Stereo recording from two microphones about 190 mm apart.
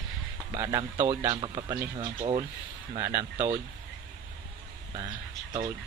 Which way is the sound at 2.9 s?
15° right (ahead or behind).